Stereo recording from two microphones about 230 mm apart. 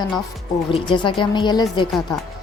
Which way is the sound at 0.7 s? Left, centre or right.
Left.